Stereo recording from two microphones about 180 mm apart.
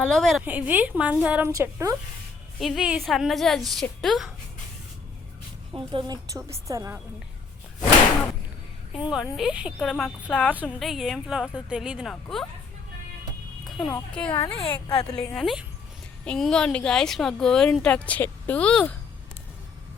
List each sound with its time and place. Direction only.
0.0 s speech: 5° left (ahead or behind)
0.4 s a woman's voice: 10° right (ahead or behind)
2.6 s speech: centre (ahead or behind)
5.7 s a woman's voice: 25° right (ahead or behind)
8.9 s speech: 5° right (ahead or behind)
13.7 s a sound: centre (ahead or behind)
14.3 s a woman's voice: 25° left (ahead or behind)
15.2 s speech: 5° left (ahead or behind)